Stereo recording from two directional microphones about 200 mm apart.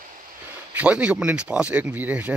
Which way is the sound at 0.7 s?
5° right (ahead or behind).